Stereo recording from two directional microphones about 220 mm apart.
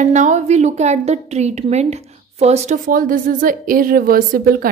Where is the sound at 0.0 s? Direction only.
35° right (ahead or behind).